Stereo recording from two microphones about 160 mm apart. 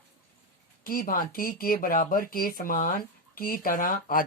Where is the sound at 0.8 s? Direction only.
60° left (ahead or behind).